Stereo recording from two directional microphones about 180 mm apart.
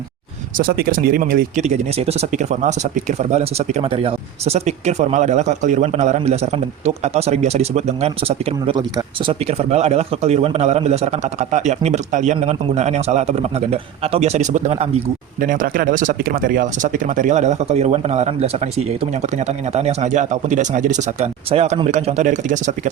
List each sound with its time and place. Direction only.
0.5 s speech: 55° right (ahead or behind); by 14.8 s 40° right (ahead or behind)
15.4 s speech: 50° right (ahead or behind)